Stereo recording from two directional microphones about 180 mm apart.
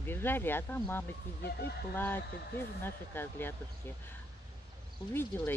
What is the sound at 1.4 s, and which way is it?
Speech, 60° left (ahead or behind).